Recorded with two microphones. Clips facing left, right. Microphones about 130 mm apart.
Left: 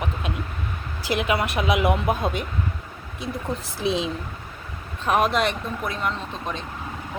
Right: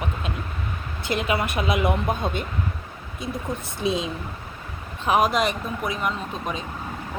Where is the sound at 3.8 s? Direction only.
Centre (ahead or behind).